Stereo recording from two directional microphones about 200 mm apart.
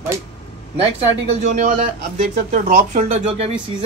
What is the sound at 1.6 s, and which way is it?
Speech, 40° right (ahead or behind).